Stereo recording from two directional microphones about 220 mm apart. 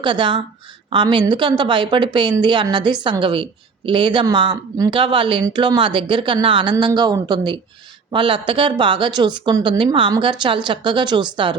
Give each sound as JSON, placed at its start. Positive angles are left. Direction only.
{"t": 0.0, "sound": "a woman's voice", "side_deg": -20}